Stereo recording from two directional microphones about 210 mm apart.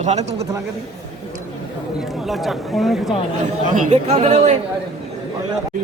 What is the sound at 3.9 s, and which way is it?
Speech, 30° right (ahead or behind).